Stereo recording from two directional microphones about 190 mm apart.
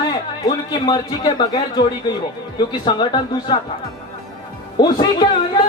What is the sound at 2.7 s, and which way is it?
Speech, 25° left (ahead or behind).